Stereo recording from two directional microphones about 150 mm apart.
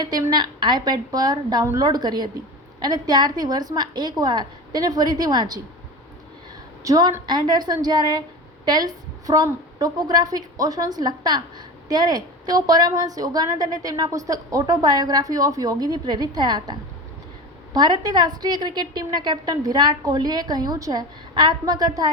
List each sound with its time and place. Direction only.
0.0 s a woman's voice: 25° right (ahead or behind)
6.8 s a woman's voice: 25° right (ahead or behind)
17.7 s a woman's voice: 25° right (ahead or behind)